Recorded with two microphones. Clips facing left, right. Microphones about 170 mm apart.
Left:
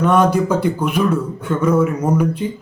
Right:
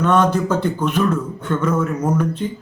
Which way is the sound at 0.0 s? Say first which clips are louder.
Left 2 dB; 10° left (ahead or behind).